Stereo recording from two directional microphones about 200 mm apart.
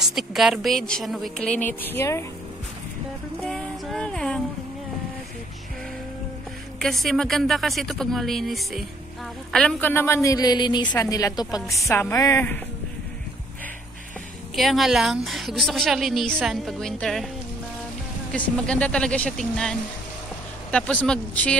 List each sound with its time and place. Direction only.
0.0 s a woman's voice: centre (ahead or behind)
3.4 s music: 5° left (ahead or behind)
6.8 s a woman's voice: centre (ahead or behind)
14.5 s a woman's voice: centre (ahead or behind)
18.3 s a woman's voice: 5° left (ahead or behind)